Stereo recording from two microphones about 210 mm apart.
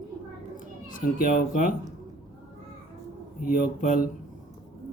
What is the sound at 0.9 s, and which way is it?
Speech, 40° left (ahead or behind).